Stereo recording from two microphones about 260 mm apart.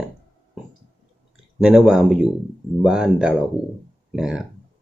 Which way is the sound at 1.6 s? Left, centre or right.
Centre.